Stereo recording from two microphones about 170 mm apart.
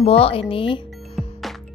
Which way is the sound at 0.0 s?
35° left (ahead or behind).